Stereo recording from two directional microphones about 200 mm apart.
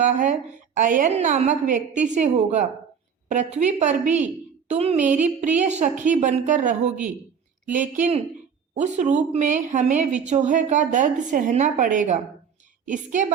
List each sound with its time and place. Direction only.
0.0 s a woman's voice: 40° right (ahead or behind)